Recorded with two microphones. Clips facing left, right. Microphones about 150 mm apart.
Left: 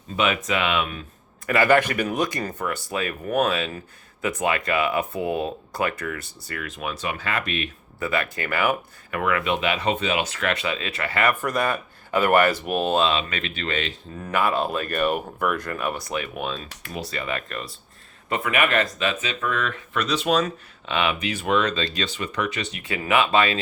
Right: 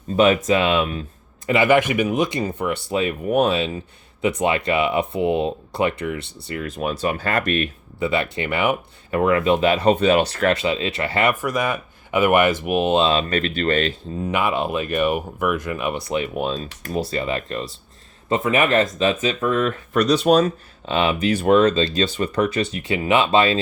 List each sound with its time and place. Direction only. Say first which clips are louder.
0.2 s speech: right 7 dB; 35° right (ahead or behind)
1.5 s speech: right 2 dB; 20° right (ahead or behind); by 7.7 s 50° right (ahead or behind)
8.0 s speech: right 4 dB; 25° right (ahead or behind)
11.3 s speech: right 1 dB; 10° right (ahead or behind)
13.1 s speech: right 5 dB; 40° right (ahead or behind)
14.2 s speech: right 1 dB; 20° right (ahead or behind)